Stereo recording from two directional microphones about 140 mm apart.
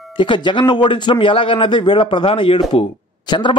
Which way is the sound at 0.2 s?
35° left (ahead or behind).